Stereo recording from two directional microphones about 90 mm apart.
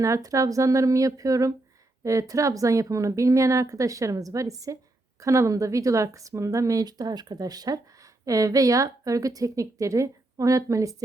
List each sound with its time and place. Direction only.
0.0 s speech: 40° right (ahead or behind)